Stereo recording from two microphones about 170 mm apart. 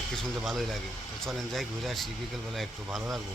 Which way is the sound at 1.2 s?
Centre (ahead or behind).